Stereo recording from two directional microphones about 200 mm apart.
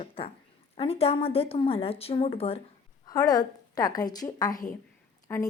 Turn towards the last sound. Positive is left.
turn(degrees=10)  # may be behind; listen again after turning